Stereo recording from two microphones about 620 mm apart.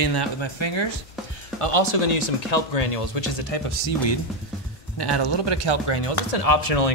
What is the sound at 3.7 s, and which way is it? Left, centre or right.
Speech, left.